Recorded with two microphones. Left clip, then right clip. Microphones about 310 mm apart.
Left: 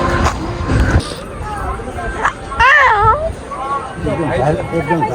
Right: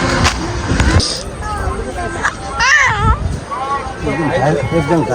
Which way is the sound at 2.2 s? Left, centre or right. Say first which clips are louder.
Left 3 dB; centre.